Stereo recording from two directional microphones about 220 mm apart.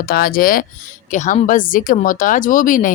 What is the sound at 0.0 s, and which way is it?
Speech, 40° left (ahead or behind).